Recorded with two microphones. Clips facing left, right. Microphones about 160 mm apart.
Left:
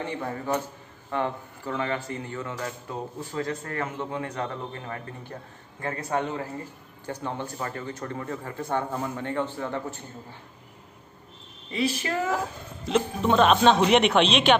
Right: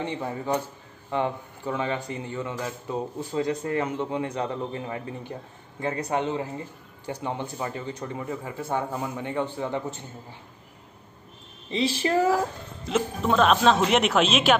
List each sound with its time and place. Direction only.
0.0 s speech: 20° right (ahead or behind)
11.7 s speech: 30° right (ahead or behind)
12.8 s speech: centre (ahead or behind)